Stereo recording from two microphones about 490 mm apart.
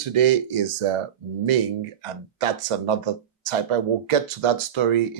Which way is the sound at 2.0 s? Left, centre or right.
Right.